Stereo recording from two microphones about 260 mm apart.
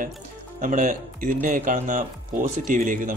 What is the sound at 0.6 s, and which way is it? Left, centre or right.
Speech, right.